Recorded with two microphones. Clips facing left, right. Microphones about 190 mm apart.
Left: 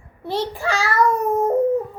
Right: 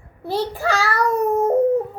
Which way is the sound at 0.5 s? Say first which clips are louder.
Even; 35° right (ahead or behind).